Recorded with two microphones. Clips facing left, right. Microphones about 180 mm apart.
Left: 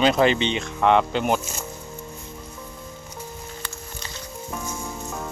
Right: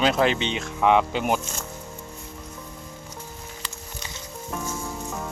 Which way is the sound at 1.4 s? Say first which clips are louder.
Left 1 dB; 5° left (ahead or behind).